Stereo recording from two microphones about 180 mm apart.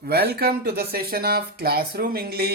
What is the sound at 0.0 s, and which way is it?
Speech, 60° right (ahead or behind).